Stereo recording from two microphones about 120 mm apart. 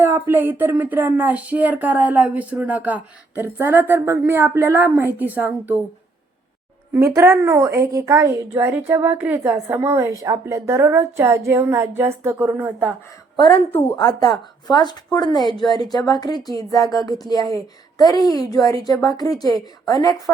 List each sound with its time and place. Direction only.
0.0 s speech: 20° right (ahead or behind)
6.9 s a woman's voice: 25° right (ahead or behind)
13.9 s speech: 35° left (ahead or behind)
15.4 s a woman's voice: centre (ahead or behind)
15.7 s speech: 35° left (ahead or behind)